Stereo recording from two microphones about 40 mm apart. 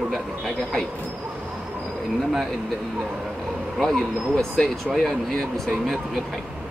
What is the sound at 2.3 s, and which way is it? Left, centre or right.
Speech, centre.